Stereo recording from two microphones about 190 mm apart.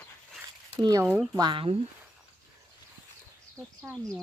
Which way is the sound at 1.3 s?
20° right (ahead or behind).